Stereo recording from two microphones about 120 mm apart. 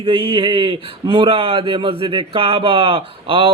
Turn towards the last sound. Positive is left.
turn(degrees=-50)  # may be behind; listen again after turning